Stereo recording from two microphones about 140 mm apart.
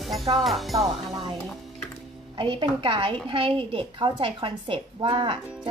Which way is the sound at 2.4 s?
35° right (ahead or behind).